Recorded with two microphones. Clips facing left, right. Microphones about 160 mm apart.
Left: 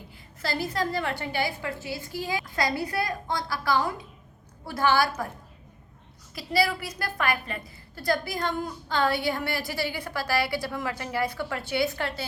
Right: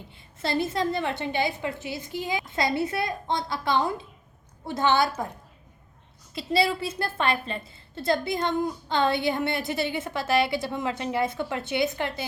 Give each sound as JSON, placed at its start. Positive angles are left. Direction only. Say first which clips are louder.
{"t": 0.1, "sound": "a woman's voice", "louder": "right 4 dB", "side_deg": -25}
{"t": 6.3, "sound": "a woman's voice", "louder": "right 2 dB", "side_deg": -25}